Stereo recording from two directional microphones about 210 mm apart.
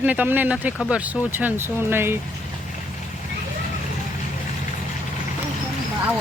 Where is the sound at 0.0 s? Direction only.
10° right (ahead or behind).